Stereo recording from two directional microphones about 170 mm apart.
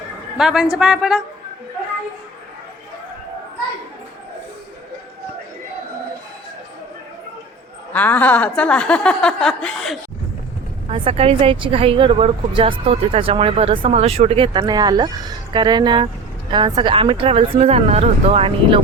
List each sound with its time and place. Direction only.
0.3 s a woman's voice: 5° right (ahead or behind)
7.9 s speech: 10° left (ahead or behind)
10.8 s speech: 35° right (ahead or behind)